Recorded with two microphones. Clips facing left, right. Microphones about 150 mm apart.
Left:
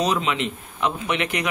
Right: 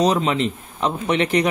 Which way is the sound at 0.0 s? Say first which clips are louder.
Right 4 dB; 35° right (ahead or behind).